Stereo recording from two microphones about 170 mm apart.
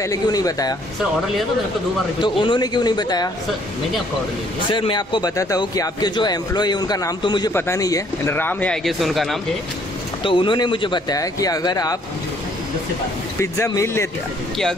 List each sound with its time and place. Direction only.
0.0 s a man's voice: 20° left (ahead or behind)
2.2 s a man's voice: 30° left (ahead or behind)
4.6 s a man's voice: 30° left (ahead or behind); by 9.4 s centre (ahead or behind)
10.2 s a man's voice: 30° left (ahead or behind)
13.4 s speech: 15° left (ahead or behind)